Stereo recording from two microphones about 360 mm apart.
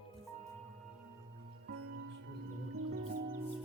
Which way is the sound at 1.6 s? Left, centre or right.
Right.